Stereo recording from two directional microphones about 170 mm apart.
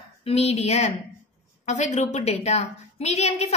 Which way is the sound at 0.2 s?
35° left (ahead or behind).